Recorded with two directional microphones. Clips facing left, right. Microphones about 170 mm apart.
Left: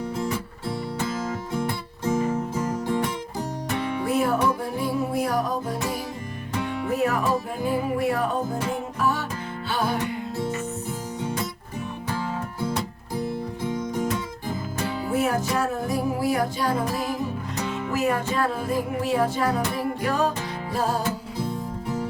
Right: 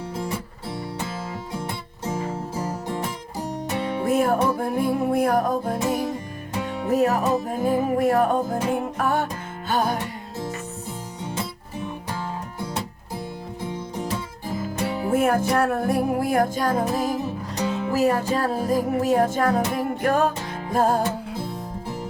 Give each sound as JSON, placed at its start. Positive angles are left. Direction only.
{"t": 4.0, "sound": "music", "side_deg": -50}
{"t": 6.8, "sound": "music", "side_deg": -40}
{"t": 15.1, "sound": "music", "side_deg": -55}